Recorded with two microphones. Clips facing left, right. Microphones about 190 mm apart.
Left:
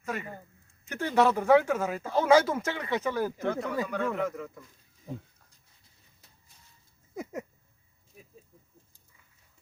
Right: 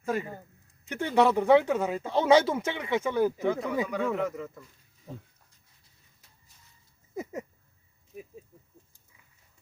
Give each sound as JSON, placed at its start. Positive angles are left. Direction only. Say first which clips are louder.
{"t": 0.0, "sound": "speech", "louder": "right 5 dB", "side_deg": -30}
{"t": 0.9, "sound": "speech", "louder": "right 1 dB", "side_deg": -15}
{"t": 3.5, "sound": "speech", "louder": "right 2 dB", "side_deg": -5}